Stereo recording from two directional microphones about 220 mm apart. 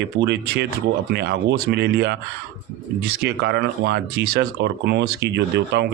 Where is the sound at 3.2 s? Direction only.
45° right (ahead or behind).